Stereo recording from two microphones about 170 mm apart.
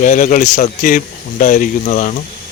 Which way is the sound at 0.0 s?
50° left (ahead or behind).